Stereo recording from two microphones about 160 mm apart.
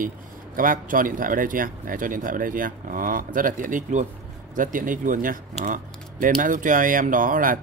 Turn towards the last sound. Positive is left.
turn(degrees=-60)  # may be behind; listen again after turning